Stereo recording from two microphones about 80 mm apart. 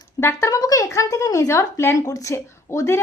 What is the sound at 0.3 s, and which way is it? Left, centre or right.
Speech, left.